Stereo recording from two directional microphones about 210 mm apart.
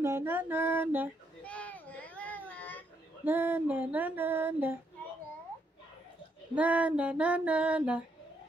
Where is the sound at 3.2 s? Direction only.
10° right (ahead or behind).